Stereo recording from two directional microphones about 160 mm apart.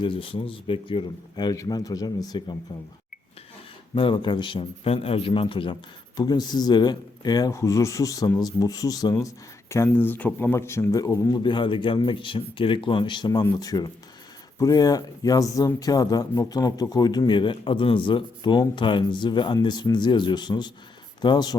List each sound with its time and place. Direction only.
0.0 s speech: 35° left (ahead or behind)
3.9 s a man's voice: 30° left (ahead or behind)